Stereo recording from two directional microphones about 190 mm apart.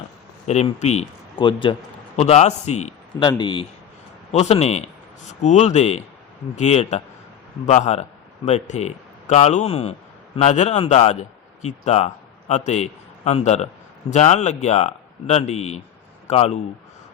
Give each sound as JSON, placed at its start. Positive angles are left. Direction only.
{"t": 0.4, "sound": "a man's voice", "side_deg": 35}
{"t": 3.2, "sound": "a man's voice", "side_deg": 25}